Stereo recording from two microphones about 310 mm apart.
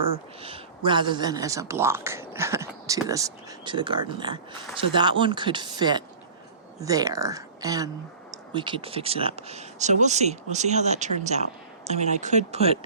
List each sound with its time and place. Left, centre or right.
0.4 s speech: centre